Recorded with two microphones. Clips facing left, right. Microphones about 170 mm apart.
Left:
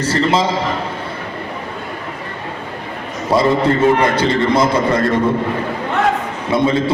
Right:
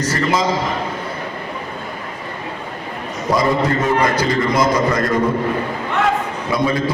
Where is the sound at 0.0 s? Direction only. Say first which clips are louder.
Left 3 dB; 30° left (ahead or behind).